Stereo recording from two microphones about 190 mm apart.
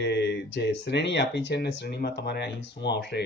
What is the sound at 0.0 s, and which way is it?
Speech, 65° left (ahead or behind).